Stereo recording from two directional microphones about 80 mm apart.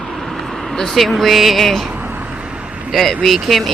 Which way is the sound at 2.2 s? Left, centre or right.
Centre.